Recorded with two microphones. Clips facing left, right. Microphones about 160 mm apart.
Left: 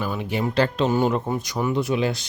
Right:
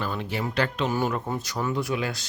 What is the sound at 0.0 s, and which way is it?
Speech, 10° left (ahead or behind).